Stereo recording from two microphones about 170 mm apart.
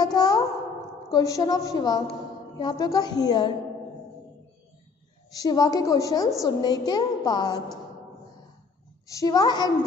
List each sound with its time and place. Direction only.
0.0 s a sound: 25° left (ahead or behind)
1.1 s a woman's voice: 20° left (ahead or behind)
5.4 s a woman's voice: 20° left (ahead or behind)
9.0 s a woman's voice: 20° left (ahead or behind)